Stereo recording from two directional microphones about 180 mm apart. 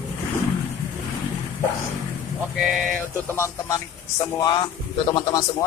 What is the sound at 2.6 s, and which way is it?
Speech, centre (ahead or behind).